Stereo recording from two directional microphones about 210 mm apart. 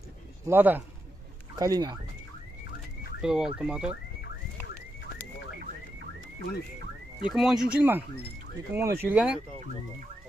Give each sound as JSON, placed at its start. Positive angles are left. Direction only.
{"t": 0.5, "sound": "speech", "side_deg": -10}
{"t": 3.2, "sound": "speech", "side_deg": -5}
{"t": 7.2, "sound": "speech", "side_deg": 0}